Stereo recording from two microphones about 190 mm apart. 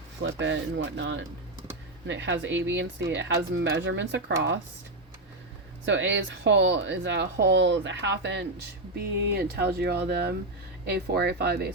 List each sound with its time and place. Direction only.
0.2 s speech: 70° right (ahead or behind)
5.8 s speech: 75° right (ahead or behind)
9.0 s speech: 55° right (ahead or behind)